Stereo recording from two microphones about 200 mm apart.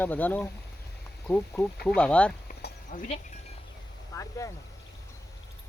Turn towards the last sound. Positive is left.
turn(degrees=15)  # may be behind; listen again after turning